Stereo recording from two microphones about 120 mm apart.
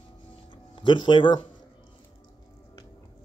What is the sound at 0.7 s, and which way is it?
Speech, 40° left (ahead or behind).